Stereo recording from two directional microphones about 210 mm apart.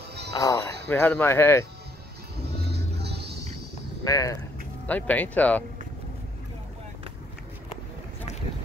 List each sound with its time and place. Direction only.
0.3 s a sound: 15° left (ahead or behind)
0.8 s speech: 10° left (ahead or behind)
2.7 s music: 50° right (ahead or behind)
4.0 s speech: 15° left (ahead or behind)